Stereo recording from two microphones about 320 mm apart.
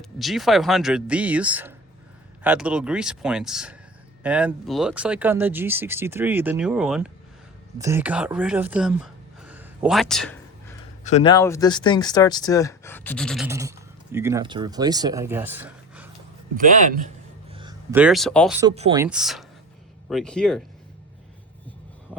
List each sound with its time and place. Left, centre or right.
0.0 s speech: centre
11.0 s speech: centre
16.6 s a man's voice: right
17.5 s speech: centre
18.7 s speech: centre
19.0 s speech: centre
22.1 s a sound: centre